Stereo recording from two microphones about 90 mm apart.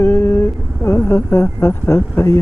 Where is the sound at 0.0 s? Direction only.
30° left (ahead or behind).